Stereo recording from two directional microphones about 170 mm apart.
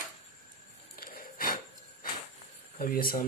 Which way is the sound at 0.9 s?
60° left (ahead or behind).